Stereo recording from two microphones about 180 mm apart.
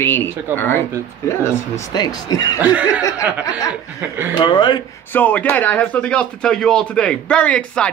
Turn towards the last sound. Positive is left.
turn(degrees=5)  # may be behind; listen again after turning